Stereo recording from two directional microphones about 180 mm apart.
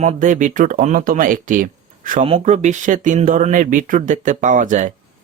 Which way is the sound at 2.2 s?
35° right (ahead or behind).